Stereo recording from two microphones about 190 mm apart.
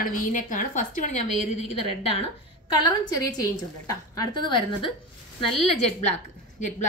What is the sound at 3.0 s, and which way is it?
A woman's voice, 20° left (ahead or behind).